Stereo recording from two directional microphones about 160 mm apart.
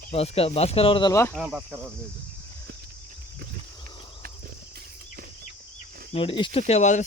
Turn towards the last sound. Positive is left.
turn(degrees=45)  # may be behind; listen again after turning